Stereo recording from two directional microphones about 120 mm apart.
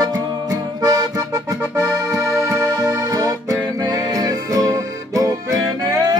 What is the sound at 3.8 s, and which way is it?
Music, 30° right (ahead or behind).